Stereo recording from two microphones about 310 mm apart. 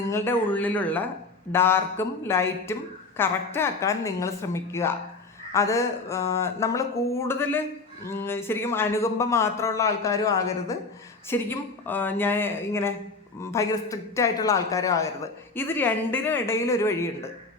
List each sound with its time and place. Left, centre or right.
0.1 s speech: centre